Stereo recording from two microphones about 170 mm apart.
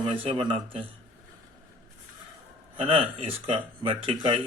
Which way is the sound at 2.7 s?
35° right (ahead or behind).